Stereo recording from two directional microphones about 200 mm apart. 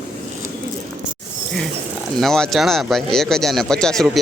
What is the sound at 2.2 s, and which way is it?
Speech, centre (ahead or behind).